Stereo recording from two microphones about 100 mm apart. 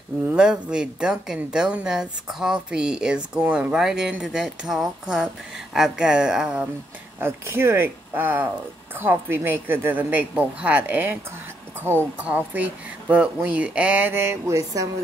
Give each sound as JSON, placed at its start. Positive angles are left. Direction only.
{"t": 0.3, "sound": "speech", "side_deg": -10}
{"t": 7.2, "sound": "a woman's voice", "side_deg": -25}
{"t": 12.2, "sound": "speech", "side_deg": -15}